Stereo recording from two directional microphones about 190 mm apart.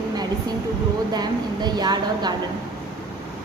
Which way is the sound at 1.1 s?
20° right (ahead or behind).